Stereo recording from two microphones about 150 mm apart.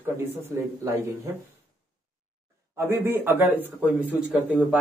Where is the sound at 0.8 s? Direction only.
20° right (ahead or behind).